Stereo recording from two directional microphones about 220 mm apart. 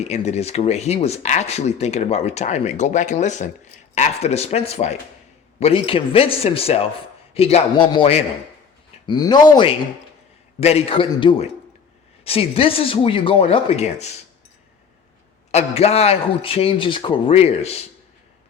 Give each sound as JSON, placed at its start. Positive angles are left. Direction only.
{"t": 0.0, "sound": "a man's voice", "side_deg": 30}
{"t": 15.5, "sound": "a man's voice", "side_deg": 30}